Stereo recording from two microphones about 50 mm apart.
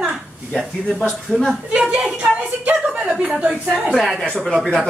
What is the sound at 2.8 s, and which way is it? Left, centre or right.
Chuckle, right.